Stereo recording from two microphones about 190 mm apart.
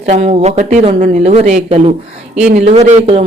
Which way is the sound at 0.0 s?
35° right (ahead or behind).